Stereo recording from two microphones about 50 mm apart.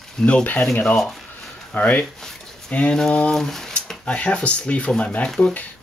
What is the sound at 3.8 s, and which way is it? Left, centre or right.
Speech, centre.